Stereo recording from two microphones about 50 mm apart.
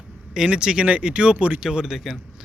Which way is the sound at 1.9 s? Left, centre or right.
Centre.